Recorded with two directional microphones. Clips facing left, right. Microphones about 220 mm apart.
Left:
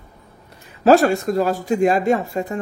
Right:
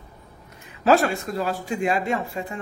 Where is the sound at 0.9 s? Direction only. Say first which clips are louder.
Left 6 dB; 40° left (ahead or behind).